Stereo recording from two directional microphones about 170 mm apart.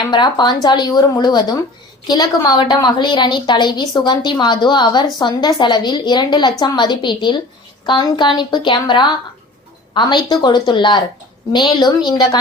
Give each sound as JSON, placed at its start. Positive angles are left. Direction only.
{"t": 0.1, "sound": "a woman's voice", "side_deg": 25}